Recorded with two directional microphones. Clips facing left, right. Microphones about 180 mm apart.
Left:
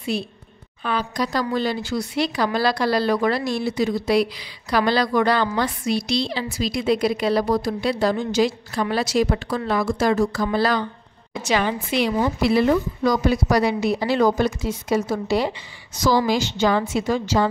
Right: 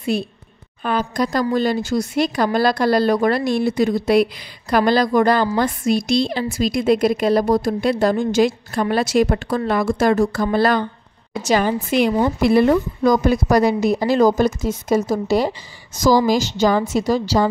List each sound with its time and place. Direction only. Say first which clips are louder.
0.1 s speech: right 4 dB; 50° right (ahead or behind)
11.4 s a woman's voice: right 4 dB; 40° right (ahead or behind)